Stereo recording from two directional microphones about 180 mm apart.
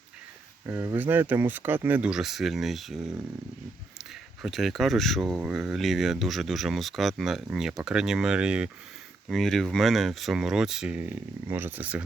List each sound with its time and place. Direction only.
0.7 s speech: 10° right (ahead or behind)
4.4 s speech: centre (ahead or behind)